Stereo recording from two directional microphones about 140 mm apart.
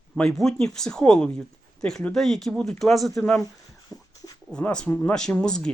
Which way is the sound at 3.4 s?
30° left (ahead or behind).